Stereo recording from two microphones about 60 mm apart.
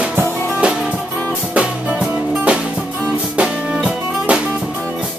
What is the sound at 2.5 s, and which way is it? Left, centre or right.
Music, right.